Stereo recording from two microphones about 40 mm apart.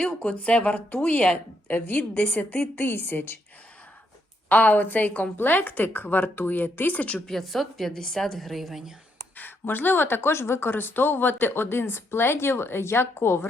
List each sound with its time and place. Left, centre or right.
0.0 s speech: left
1.6 s speech: left
2.8 s speech: left
4.4 s speech: left
7.3 s a woman's voice: centre
9.4 s a woman's voice: left